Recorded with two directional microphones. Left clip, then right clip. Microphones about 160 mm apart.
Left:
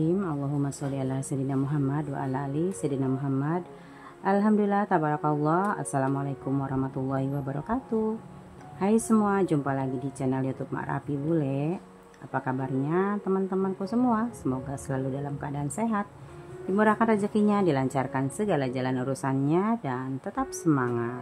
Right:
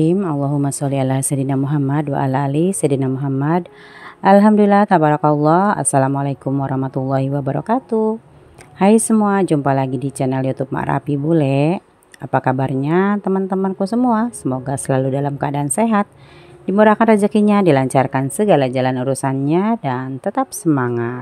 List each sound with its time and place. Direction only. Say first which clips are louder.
0.0 s a woman's voice: right 11 dB; 45° right (ahead or behind)